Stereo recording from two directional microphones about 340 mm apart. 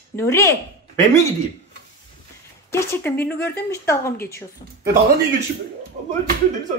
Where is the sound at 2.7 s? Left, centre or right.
Centre.